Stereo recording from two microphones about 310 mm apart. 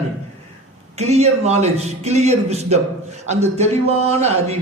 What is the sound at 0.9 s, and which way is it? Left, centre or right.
A man's voice, right.